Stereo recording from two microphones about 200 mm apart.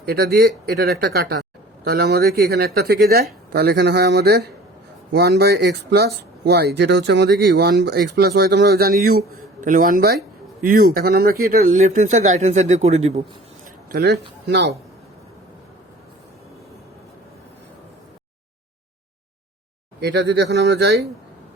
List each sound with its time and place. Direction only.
0.0 s speech: 50° right (ahead or behind); by 13.2 s 30° right (ahead or behind)
13.9 s speech: 55° right (ahead or behind)
20.0 s speech: 60° right (ahead or behind)